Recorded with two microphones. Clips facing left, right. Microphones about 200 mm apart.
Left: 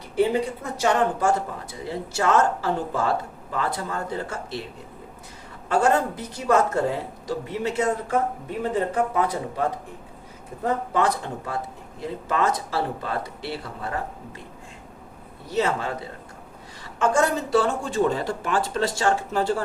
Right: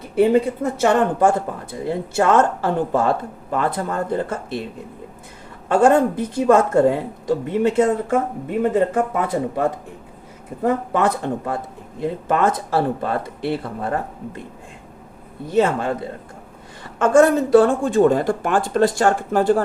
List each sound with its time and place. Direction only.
0.8 s a woman's voice: 60° right (ahead or behind)
5.6 s a woman's voice: 55° right (ahead or behind)
15.4 s speech: 55° right (ahead or behind)